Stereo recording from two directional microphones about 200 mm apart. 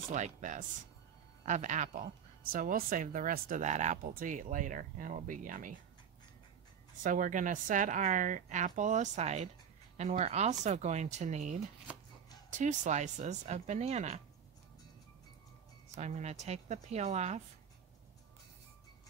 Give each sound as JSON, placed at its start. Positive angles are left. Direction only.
{"t": 0.1, "sound": "speech", "side_deg": -40}
{"t": 7.0, "sound": "speech", "side_deg": -40}
{"t": 15.9, "sound": "speech", "side_deg": -35}